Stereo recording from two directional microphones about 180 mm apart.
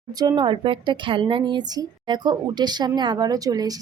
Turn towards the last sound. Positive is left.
turn(degrees=-20)  # may be behind; listen again after turning